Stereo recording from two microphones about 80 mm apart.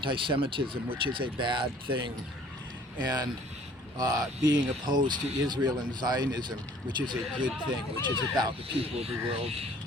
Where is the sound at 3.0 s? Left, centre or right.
Right.